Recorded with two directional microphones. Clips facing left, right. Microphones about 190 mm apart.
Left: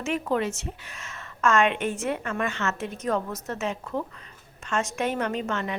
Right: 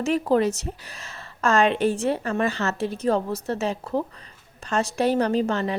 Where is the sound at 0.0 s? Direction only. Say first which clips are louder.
Right 6 dB; 35° right (ahead or behind).